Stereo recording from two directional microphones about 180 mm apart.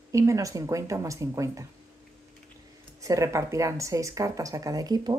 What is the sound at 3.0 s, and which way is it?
Speech, 20° right (ahead or behind).